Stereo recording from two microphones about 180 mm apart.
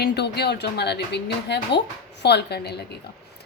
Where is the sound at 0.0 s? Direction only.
65° left (ahead or behind).